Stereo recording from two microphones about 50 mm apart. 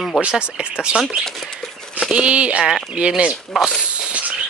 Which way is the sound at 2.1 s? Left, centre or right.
Right.